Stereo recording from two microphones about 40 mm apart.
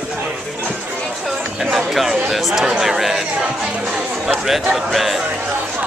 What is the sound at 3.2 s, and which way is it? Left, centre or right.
Speech, right.